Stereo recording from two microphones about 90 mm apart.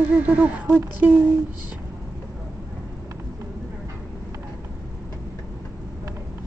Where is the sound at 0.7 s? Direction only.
20° right (ahead or behind).